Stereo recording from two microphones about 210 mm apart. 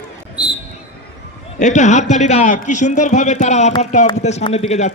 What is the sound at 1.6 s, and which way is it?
A man's voice, 35° left (ahead or behind).